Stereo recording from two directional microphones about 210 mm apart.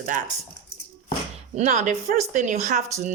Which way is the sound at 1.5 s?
35° right (ahead or behind).